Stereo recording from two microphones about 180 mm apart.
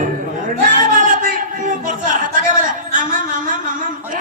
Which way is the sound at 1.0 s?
50° right (ahead or behind).